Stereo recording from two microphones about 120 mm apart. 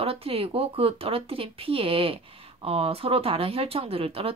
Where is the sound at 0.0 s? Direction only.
55° right (ahead or behind).